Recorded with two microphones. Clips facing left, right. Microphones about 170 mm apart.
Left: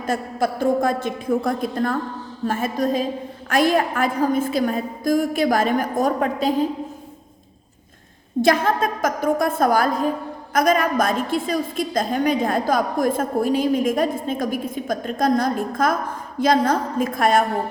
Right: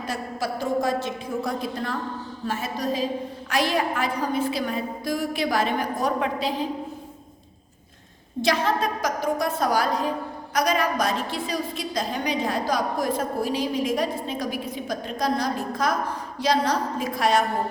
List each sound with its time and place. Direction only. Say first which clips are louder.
0.0 s a woman's voice: left 6 dB; 50° left (ahead or behind)
8.4 s a woman's voice: left 5 dB; 50° left (ahead or behind)